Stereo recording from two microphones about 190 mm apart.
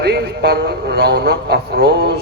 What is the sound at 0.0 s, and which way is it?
A man's voice, 60° right (ahead or behind).